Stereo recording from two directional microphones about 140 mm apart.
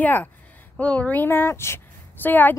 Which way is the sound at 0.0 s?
10° left (ahead or behind).